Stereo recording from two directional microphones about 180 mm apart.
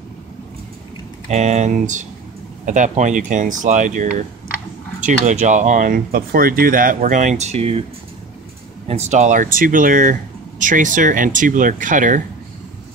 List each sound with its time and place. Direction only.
1.3 s speech: 40° right (ahead or behind)
8.8 s speech: 35° right (ahead or behind)